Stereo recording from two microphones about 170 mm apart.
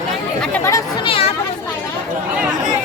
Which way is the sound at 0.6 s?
20° left (ahead or behind).